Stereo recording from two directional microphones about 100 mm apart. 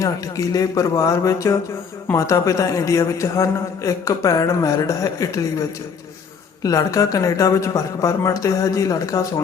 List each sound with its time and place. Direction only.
0.0 s a man's voice: 35° left (ahead or behind)